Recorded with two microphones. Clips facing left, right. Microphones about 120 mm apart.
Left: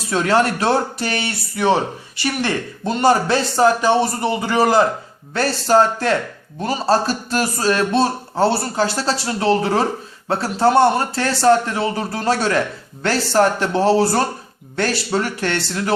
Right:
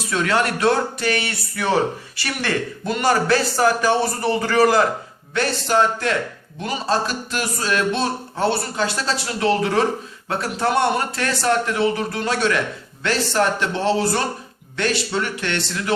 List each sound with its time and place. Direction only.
0.1 s speech: 30° left (ahead or behind)
5.3 s a man's voice: 35° left (ahead or behind)